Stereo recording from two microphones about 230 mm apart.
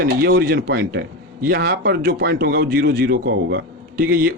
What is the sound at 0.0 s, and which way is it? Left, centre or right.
A man's voice, right.